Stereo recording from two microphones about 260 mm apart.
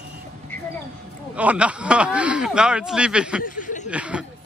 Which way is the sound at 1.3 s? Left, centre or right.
Centre.